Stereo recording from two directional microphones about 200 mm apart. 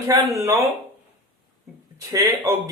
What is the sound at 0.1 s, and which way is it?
Speech, 15° right (ahead or behind).